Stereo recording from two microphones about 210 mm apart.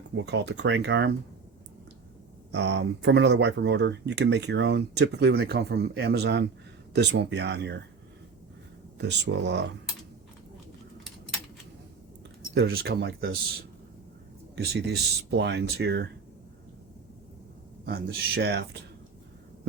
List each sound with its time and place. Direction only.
0.2 s speech: 55° right (ahead or behind)
2.5 s speech: 55° right (ahead or behind)
9.0 s speech: 55° right (ahead or behind)
12.5 s speech: 50° right (ahead or behind)
14.5 s speech: 50° right (ahead or behind)
17.8 s speech: 50° right (ahead or behind)